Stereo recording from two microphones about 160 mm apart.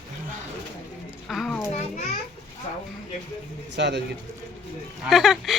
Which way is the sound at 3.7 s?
90° right.